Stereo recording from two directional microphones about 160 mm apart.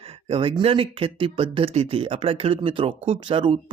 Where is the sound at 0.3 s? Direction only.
35° right (ahead or behind).